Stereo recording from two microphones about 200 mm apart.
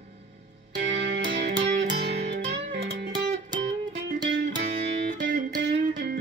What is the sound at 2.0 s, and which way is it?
Music, 55° right (ahead or behind).